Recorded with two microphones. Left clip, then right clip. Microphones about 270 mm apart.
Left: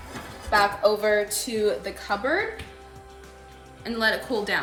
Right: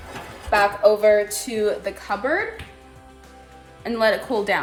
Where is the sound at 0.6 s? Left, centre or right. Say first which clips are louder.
Right 4 dB; centre.